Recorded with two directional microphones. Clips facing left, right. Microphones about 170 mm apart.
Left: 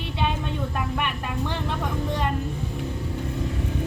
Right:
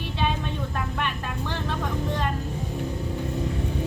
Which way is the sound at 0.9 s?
15° left (ahead or behind).